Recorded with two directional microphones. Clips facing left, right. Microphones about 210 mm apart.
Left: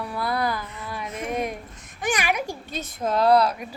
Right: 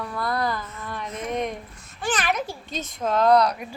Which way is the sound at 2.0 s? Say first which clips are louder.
Even; 15° left (ahead or behind).